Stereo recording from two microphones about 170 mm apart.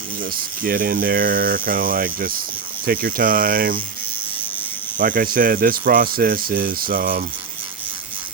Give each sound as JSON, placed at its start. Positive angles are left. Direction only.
{"t": 0.2, "sound": "speech", "side_deg": -55}
{"t": 4.9, "sound": "speech", "side_deg": -55}